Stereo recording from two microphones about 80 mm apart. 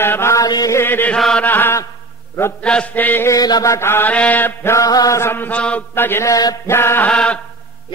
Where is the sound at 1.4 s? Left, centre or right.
Left.